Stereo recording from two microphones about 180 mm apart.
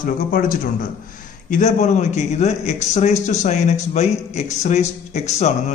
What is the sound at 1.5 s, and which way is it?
A man's voice, 40° left (ahead or behind).